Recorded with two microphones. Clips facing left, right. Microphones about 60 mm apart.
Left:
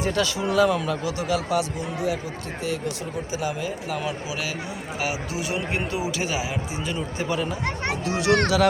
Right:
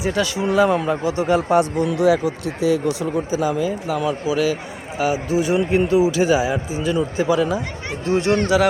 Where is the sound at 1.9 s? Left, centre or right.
Right.